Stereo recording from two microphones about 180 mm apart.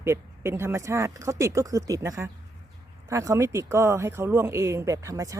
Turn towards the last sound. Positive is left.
turn(degrees=-15)  # may be behind; listen again after turning